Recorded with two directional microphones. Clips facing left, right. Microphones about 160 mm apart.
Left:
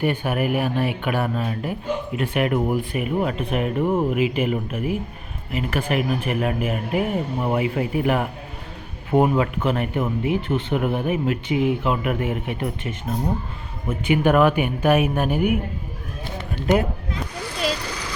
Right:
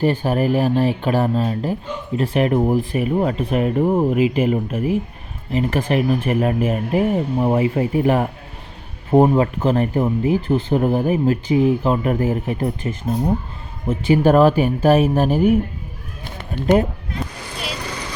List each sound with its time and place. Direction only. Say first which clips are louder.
0.0 s speech: right 4 dB; 35° right (ahead or behind)